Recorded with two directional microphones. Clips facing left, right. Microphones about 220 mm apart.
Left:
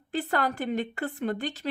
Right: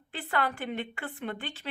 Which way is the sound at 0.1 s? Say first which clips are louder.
Left 4 dB; 40° left (ahead or behind).